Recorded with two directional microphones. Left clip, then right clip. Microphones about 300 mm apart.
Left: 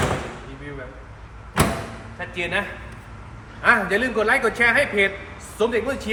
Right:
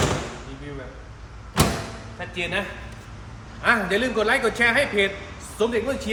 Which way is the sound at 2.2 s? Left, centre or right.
Centre.